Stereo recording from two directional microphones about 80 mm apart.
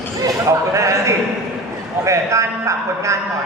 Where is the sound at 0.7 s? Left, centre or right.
Right.